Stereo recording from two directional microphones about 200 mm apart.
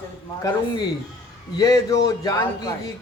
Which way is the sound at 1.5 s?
20° left (ahead or behind).